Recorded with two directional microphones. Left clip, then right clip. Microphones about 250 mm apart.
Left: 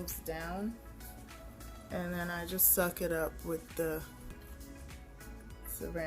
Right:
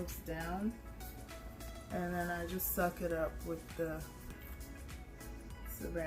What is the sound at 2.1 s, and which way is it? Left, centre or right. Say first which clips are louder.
Speech: left 1 dB; left.